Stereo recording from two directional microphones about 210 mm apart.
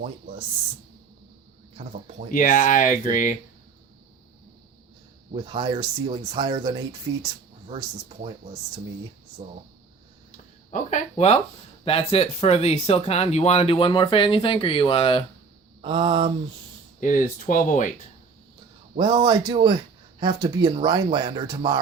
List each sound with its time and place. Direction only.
1.7 s speech: 40° right (ahead or behind)
2.3 s speech: 40° left (ahead or behind)
5.3 s speech: 25° right (ahead or behind)
9.4 s speech: 40° right (ahead or behind)
10.3 s speech: 35° left (ahead or behind)
15.8 s speech: 25° right (ahead or behind)
17.0 s speech: 40° left (ahead or behind)
18.9 s speech: 25° right (ahead or behind)